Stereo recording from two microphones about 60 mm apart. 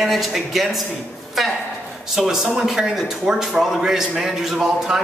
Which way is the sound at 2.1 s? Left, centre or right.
Centre.